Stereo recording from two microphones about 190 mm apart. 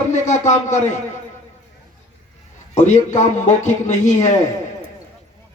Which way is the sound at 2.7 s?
40° left (ahead or behind).